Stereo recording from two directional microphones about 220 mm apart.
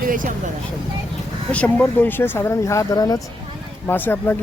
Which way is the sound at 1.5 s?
5° left (ahead or behind).